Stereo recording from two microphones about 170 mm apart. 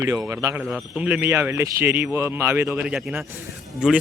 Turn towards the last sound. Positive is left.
turn(degrees=-5)  # may be behind; listen again after turning